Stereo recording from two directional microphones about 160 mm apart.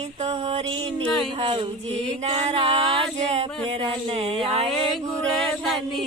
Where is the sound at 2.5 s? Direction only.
35° right (ahead or behind).